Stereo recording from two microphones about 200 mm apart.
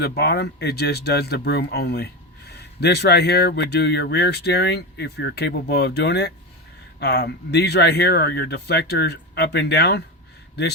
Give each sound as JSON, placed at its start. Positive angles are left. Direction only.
{"t": 0.2, "sound": "speech", "side_deg": 55}